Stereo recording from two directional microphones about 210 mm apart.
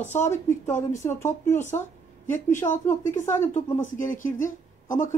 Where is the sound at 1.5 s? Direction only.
35° left (ahead or behind).